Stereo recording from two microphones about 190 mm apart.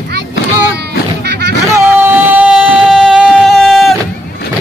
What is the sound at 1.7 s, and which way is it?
Music, 10° right (ahead or behind).